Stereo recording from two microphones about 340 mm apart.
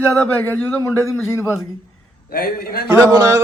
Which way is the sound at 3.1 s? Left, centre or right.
Centre.